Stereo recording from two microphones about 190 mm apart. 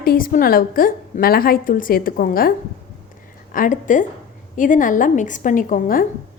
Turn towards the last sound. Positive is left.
turn(degrees=45)  # may be behind; listen again after turning